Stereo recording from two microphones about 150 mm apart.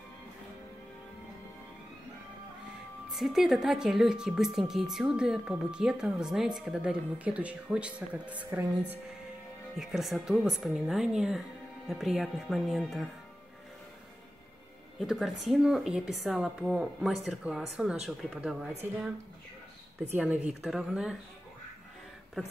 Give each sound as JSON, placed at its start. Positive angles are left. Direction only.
{"t": 3.1, "sound": "a woman's voice", "side_deg": 0}
{"t": 15.0, "sound": "a woman's voice", "side_deg": 0}
{"t": 20.6, "sound": "a woman's voice", "side_deg": -5}